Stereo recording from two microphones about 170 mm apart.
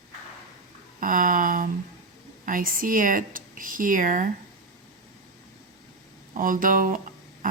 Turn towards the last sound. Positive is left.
turn(degrees=-50)  # may be behind; listen again after turning